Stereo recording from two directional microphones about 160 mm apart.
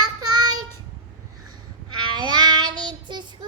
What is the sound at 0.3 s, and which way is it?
Child singing, 25° right (ahead or behind).